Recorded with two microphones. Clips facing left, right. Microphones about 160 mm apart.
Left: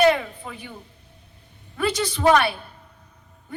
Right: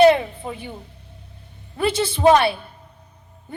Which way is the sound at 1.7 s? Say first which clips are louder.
Right 3 dB; 25° right (ahead or behind).